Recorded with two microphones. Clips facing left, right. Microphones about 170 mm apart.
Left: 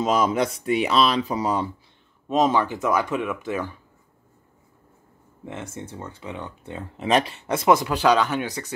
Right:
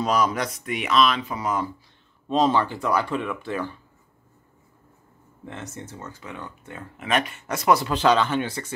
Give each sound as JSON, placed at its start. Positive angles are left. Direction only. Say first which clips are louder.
{"t": 0.0, "sound": "speech", "louder": "left 2 dB", "side_deg": 25}
{"t": 2.2, "sound": "speech", "louder": "left 1 dB", "side_deg": 15}
{"t": 5.4, "sound": "speech", "louder": "left 2 dB", "side_deg": 25}
{"t": 6.7, "sound": "speech", "louder": "left 4 dB", "side_deg": 35}